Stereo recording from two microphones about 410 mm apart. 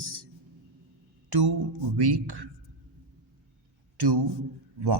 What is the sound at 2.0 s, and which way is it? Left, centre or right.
Speech, right.